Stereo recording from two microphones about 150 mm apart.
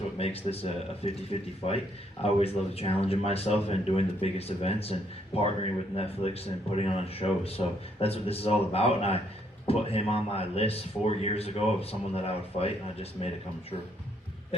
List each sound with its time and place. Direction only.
0.2 s speech: 40° left (ahead or behind)